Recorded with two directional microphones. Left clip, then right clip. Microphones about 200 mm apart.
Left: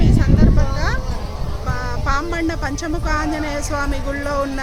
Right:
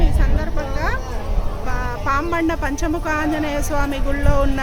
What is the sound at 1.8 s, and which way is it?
Speech, 10° right (ahead or behind).